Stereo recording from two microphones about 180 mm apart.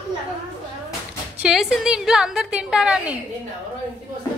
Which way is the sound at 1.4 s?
5° right (ahead or behind).